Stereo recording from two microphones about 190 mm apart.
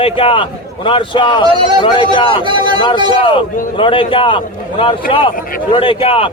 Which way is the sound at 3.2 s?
25° left (ahead or behind).